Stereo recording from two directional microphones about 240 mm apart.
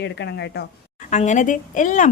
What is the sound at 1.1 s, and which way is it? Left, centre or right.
A woman's voice, left.